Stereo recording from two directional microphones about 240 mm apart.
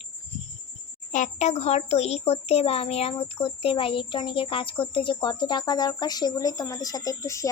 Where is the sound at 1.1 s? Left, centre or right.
Left.